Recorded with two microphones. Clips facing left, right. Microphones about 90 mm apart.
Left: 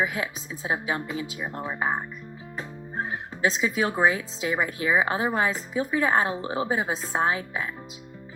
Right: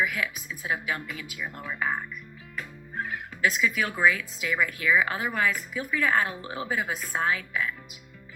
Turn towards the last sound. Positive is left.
turn(degrees=30)  # may be behind; listen again after turning